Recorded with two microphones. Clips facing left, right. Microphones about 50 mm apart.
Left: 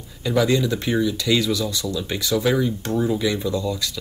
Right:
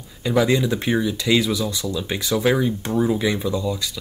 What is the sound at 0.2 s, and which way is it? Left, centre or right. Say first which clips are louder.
Speech: right 1 dB; centre.